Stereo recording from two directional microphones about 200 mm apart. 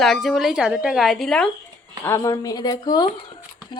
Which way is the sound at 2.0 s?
15° left (ahead or behind).